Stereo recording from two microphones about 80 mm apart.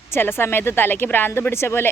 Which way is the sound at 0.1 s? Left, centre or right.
Left.